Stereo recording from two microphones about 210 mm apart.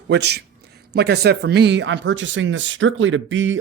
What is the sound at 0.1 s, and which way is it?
Speech, 50° right (ahead or behind).